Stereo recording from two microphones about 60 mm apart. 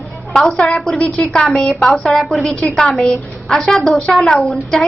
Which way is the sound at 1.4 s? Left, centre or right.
Centre.